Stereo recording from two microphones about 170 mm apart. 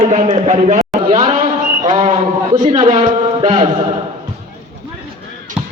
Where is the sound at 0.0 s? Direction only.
40° right (ahead or behind).